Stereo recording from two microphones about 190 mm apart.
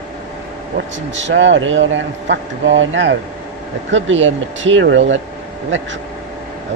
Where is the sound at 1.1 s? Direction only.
75° right (ahead or behind).